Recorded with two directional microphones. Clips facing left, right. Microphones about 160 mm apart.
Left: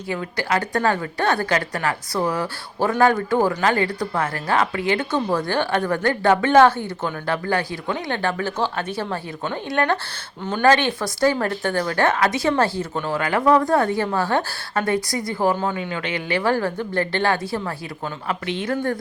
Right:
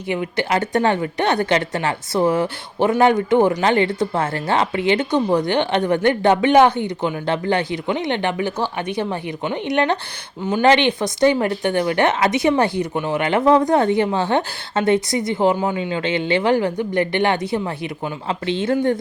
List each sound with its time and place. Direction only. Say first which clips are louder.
0.1 s a woman's voice: right 3 dB; 20° right (ahead or behind)